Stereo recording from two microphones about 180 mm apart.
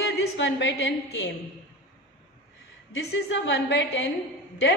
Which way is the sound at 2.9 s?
85° left.